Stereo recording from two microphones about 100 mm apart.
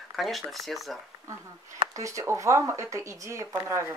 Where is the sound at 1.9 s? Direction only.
35° right (ahead or behind).